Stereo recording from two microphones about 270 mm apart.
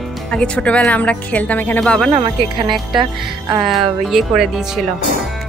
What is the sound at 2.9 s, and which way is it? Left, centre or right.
Music, centre.